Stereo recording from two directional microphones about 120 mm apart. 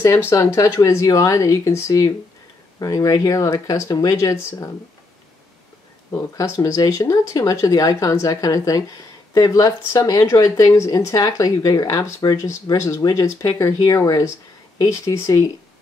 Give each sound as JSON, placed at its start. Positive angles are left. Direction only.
{"t": 0.3, "sound": "speech", "side_deg": 25}
{"t": 6.1, "sound": "speech", "side_deg": 25}